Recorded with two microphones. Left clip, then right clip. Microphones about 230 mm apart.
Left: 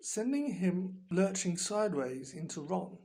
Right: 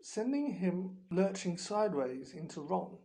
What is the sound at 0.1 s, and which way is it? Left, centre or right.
Speech, left.